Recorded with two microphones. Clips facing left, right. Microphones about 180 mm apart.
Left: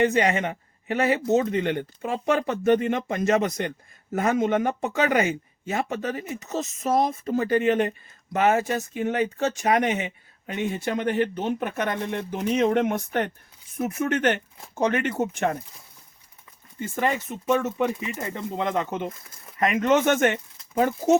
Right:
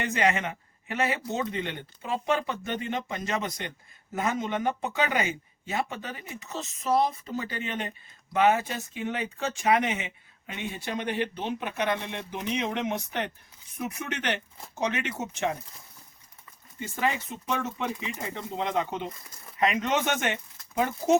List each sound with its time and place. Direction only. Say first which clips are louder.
0.0 s speech: left 5 dB; 40° left (ahead or behind); by 15.5 s 55° left (ahead or behind)
16.8 s speech: left 4 dB; 50° left (ahead or behind)